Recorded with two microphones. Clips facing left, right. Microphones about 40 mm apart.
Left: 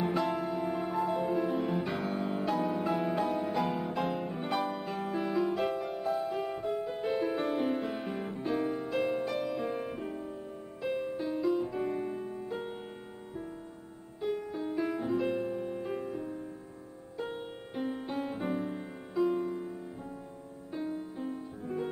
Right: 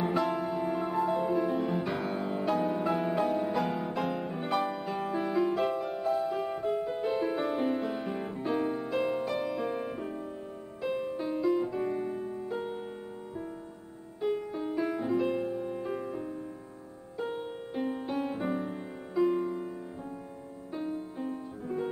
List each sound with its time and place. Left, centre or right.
0.1 s music: centre
8.5 s music: centre
11.1 s music: centre
11.4 s music: centre
14.5 s music: centre
17.8 s music: centre
19.1 s music: centre
20.7 s music: centre